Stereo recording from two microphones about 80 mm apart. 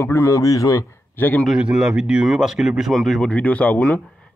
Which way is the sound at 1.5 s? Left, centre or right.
Centre.